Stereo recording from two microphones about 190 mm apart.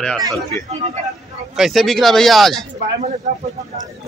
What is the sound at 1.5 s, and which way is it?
Speech, centre (ahead or behind).